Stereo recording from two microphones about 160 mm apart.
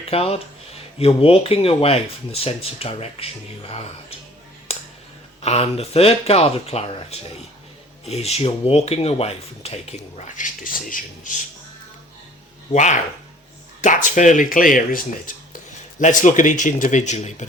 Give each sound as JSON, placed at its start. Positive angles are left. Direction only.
{"t": 0.1, "sound": "speech", "side_deg": 35}
{"t": 4.7, "sound": "music", "side_deg": 40}
{"t": 5.4, "sound": "speech", "side_deg": 40}
{"t": 12.7, "sound": "speech", "side_deg": 50}